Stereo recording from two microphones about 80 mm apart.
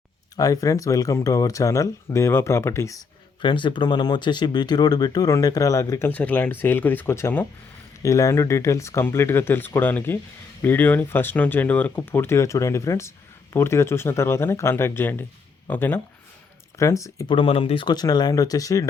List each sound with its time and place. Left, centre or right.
0.3 s speech: left
3.4 s speech: left
6.1 s speech: centre
16.7 s speech: left
17.2 s speech: left